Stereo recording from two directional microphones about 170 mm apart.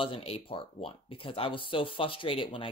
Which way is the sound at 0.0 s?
35° left (ahead or behind).